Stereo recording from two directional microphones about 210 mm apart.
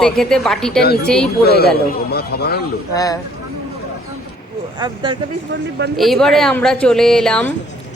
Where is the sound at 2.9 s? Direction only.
15° left (ahead or behind).